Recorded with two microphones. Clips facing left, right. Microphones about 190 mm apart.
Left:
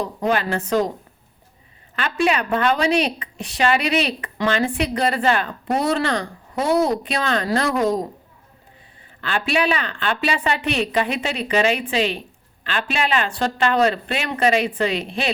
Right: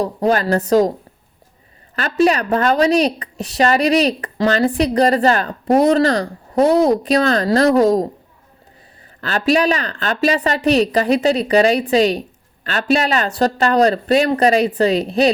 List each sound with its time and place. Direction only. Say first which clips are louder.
0.0 s a woman's voice: right 5 dB; 35° right (ahead or behind)
2.0 s a woman's voice: right 5 dB; 40° right (ahead or behind)
9.2 s a woman's voice: right 5 dB; 40° right (ahead or behind)